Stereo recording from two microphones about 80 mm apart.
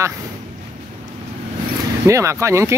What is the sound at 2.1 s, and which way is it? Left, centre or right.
Speech, right.